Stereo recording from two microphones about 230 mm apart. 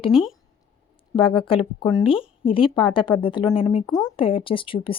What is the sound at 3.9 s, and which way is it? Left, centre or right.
Speech, centre.